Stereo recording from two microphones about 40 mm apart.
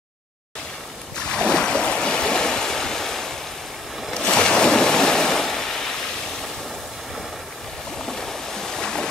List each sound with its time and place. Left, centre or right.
1.1 s waves: left
8.0 s stream: centre